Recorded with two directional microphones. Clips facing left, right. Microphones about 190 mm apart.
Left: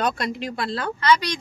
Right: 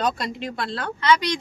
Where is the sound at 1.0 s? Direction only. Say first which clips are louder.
Right 1 dB; 20° right (ahead or behind).